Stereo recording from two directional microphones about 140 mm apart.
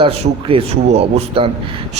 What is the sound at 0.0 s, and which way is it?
A man's voice, 40° right (ahead or behind).